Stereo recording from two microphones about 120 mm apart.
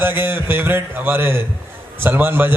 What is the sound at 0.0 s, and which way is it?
Speech, 15° right (ahead or behind).